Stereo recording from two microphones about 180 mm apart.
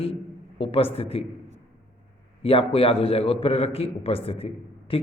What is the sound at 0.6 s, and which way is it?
Speech, 30° left (ahead or behind).